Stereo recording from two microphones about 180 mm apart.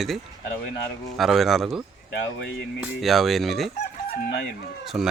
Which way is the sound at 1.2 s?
Centre (ahead or behind).